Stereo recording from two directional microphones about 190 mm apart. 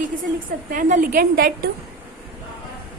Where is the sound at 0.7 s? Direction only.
45° right (ahead or behind).